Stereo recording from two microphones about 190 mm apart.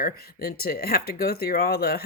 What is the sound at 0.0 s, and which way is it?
Speech, 55° left (ahead or behind).